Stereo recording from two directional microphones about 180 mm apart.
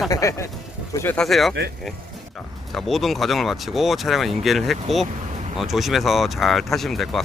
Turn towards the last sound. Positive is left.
turn(degrees=0)  # may be behind; listen again after turning